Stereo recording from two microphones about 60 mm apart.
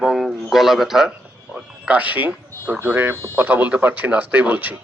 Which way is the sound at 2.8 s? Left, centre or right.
Right.